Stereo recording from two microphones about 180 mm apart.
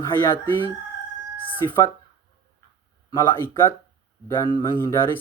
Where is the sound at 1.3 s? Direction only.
10° left (ahead or behind).